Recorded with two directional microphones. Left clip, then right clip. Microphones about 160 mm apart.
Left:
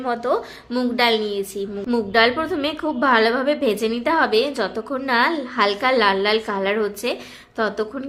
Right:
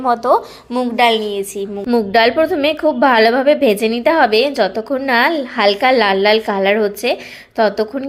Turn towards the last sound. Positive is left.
turn(degrees=-25)  # may be behind; listen again after turning